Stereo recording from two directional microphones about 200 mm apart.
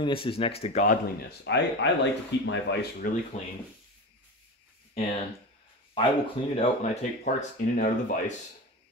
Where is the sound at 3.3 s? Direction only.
30° left (ahead or behind).